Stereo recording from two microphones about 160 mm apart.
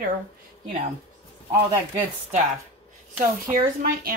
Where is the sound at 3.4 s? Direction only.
65° right (ahead or behind).